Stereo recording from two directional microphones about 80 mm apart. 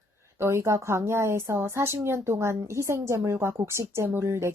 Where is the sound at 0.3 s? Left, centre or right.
Right.